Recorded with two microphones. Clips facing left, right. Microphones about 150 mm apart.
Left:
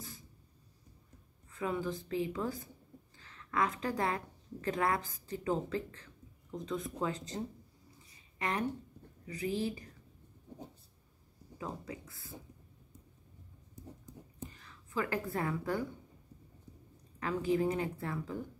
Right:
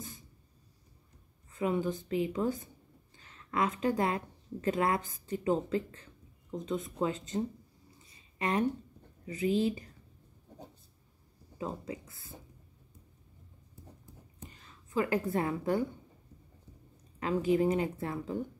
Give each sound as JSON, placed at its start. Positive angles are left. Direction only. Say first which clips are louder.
{"t": 1.5, "sound": "a woman's voice", "louder": "right 4 dB", "side_deg": -20}
{"t": 11.5, "sound": "speech", "louder": "right 4 dB", "side_deg": -20}
{"t": 14.5, "sound": "speech", "louder": "right 6 dB", "side_deg": -20}
{"t": 16.9, "sound": "a woman's voice", "louder": "right 4 dB", "side_deg": -20}